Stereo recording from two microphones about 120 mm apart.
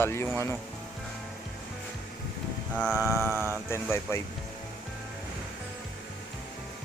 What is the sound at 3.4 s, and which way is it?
Speech, 25° right (ahead or behind).